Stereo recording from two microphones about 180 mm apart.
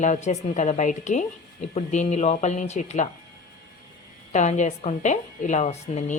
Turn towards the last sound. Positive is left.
turn(degrees=40)  # may be behind; listen again after turning